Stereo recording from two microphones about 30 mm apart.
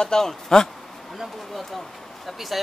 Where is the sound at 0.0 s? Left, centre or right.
Left.